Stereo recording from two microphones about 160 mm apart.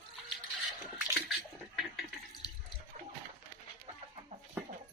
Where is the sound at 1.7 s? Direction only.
Centre (ahead or behind).